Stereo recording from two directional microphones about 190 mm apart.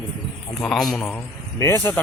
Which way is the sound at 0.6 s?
Centre (ahead or behind).